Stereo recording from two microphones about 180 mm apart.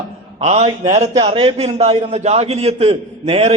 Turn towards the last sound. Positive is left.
turn(degrees=-35)  # may be behind; listen again after turning